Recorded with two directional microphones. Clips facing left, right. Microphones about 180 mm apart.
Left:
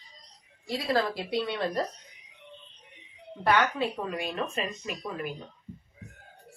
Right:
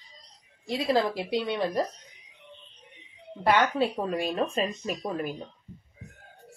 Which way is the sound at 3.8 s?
35° right (ahead or behind).